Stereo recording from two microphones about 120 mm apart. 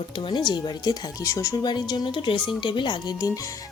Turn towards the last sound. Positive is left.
turn(degrees=40)  # may be behind; listen again after turning